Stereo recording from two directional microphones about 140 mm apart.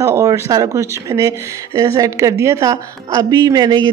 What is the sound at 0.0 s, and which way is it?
Speech, 20° right (ahead or behind).